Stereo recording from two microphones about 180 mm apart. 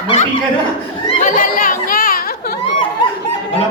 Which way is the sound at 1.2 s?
50° left (ahead or behind).